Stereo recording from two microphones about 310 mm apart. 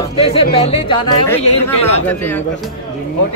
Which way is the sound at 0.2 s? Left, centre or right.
Centre.